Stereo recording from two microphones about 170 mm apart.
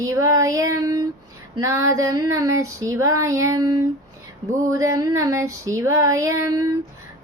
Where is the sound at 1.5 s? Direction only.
20° right (ahead or behind).